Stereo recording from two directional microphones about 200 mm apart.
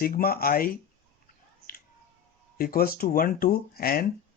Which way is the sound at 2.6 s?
50° left (ahead or behind).